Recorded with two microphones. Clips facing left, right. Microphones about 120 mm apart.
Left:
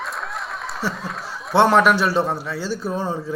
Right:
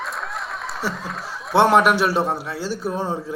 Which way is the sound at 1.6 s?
10° right (ahead or behind).